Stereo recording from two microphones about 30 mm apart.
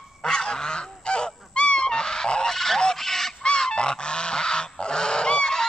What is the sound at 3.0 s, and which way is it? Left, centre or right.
Fowl, centre.